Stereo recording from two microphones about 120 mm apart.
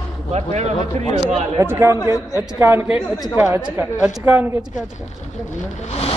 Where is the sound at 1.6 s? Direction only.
25° right (ahead or behind).